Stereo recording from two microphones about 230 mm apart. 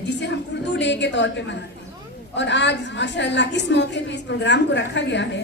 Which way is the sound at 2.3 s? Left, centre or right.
Left.